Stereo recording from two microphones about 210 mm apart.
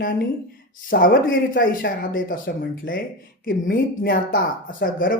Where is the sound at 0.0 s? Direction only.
40° left (ahead or behind).